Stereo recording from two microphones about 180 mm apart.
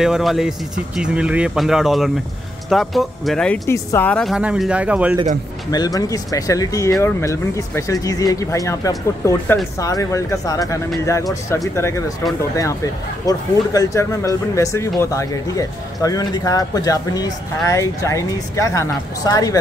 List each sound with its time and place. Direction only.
0.0 s speech: centre (ahead or behind)
5.7 s speech: 20° left (ahead or behind)